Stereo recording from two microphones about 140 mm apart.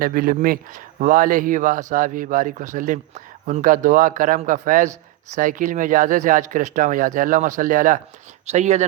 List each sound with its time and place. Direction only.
0.0 s speech: 85° right
8.4 s speech: 55° right (ahead or behind)